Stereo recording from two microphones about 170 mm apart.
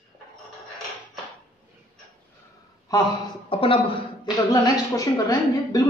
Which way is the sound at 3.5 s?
30° left (ahead or behind).